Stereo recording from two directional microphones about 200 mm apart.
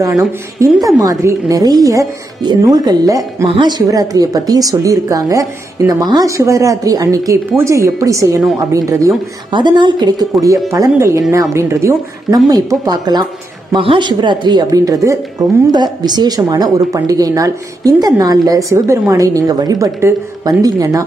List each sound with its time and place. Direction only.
1.2 s a woman's voice: 15° right (ahead or behind)